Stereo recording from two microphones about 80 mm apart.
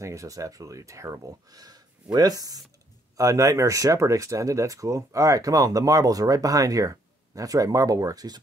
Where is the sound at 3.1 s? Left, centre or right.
Right.